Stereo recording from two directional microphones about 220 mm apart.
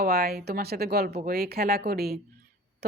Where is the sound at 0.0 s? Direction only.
45° right (ahead or behind).